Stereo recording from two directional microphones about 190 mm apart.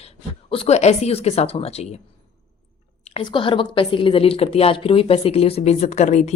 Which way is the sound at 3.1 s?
25° left (ahead or behind).